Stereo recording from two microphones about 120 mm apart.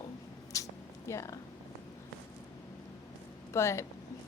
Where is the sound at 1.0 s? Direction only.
25° left (ahead or behind).